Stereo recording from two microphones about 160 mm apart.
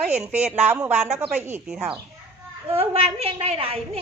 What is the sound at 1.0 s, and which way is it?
Speech, 45° right (ahead or behind).